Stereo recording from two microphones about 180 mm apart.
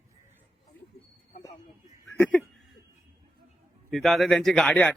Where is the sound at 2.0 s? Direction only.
5° left (ahead or behind).